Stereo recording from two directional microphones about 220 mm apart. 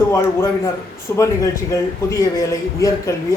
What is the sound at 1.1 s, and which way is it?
A man's voice, 15° left (ahead or behind).